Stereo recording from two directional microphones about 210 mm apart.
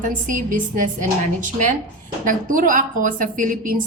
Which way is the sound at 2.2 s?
40° right (ahead or behind).